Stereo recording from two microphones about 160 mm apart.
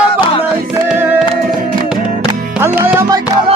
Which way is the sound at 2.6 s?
15° right (ahead or behind).